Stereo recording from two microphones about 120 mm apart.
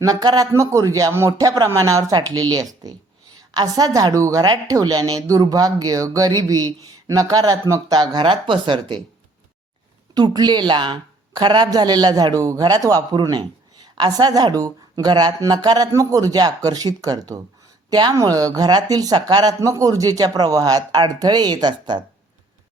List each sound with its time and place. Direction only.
0.0 s a woman's voice: 30° right (ahead or behind)
10.2 s a woman's voice: 35° right (ahead or behind)